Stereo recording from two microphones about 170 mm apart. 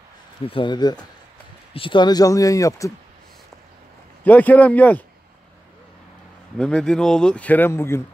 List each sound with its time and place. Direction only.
0.5 s speech: 30° left (ahead or behind)
4.2 s a man's voice: 10° left (ahead or behind)
6.6 s speech: 5° left (ahead or behind)